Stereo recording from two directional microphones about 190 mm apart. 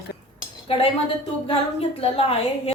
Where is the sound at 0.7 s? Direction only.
30° left (ahead or behind).